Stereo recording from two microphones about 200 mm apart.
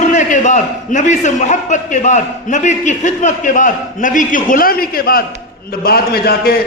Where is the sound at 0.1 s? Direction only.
35° left (ahead or behind).